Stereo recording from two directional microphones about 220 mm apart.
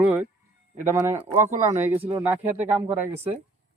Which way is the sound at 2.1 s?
10° right (ahead or behind).